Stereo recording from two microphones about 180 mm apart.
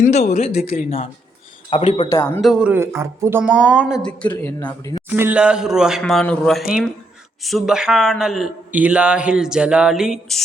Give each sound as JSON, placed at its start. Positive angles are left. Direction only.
{"t": 0.0, "sound": "speech", "side_deg": 40}
{"t": 0.6, "sound": "speech", "side_deg": 55}
{"t": 1.7, "sound": "speech", "side_deg": 30}
{"t": 2.2, "sound": "a man's voice", "side_deg": 5}
{"t": 4.6, "sound": "speech", "side_deg": 20}
{"t": 5.0, "sound": "a man's voice", "side_deg": -10}